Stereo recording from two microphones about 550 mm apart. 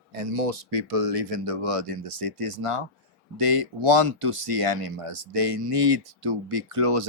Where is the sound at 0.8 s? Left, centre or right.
Right.